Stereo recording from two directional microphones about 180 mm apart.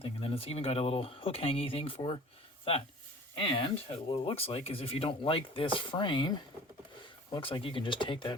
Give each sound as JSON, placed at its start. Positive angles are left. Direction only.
{"t": 0.0, "sound": "speech", "side_deg": 30}
{"t": 3.3, "sound": "speech", "side_deg": 30}